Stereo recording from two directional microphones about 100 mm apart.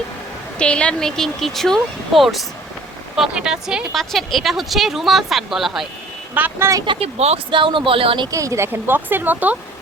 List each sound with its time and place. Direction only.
0.6 s speech: 10° left (ahead or behind)
6.3 s speech: 15° right (ahead or behind)
6.8 s speech: 70° right (ahead or behind); by 7.3 s 85° right
7.5 s speech: 55° right (ahead or behind)
8.3 s speech: 30° right (ahead or behind)